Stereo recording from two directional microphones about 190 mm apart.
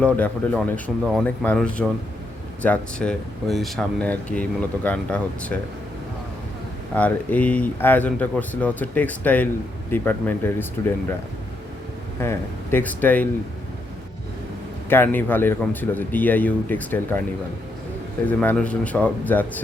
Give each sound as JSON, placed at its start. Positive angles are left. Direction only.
{"t": 0.0, "sound": "speech", "side_deg": 5}
{"t": 6.9, "sound": "speech", "side_deg": 10}
{"t": 12.2, "sound": "speech", "side_deg": 10}
{"t": 14.8, "sound": "speech", "side_deg": 10}
{"t": 18.3, "sound": "speech", "side_deg": 5}